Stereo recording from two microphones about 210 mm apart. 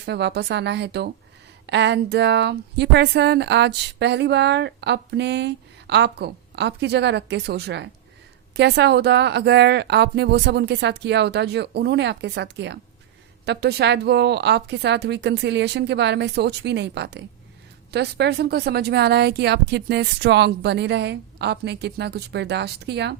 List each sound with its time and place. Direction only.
0.0 s speech: 55° right (ahead or behind)